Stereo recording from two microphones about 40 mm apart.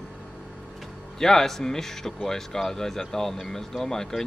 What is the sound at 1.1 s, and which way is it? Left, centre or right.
Speech, centre.